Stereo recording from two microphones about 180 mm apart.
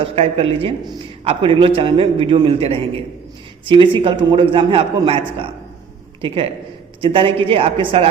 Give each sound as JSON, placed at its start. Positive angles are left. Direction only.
{"t": 0.0, "sound": "a man's voice", "side_deg": -35}